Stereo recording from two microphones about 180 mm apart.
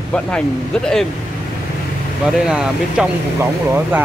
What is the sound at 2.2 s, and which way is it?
Speech, 5° right (ahead or behind).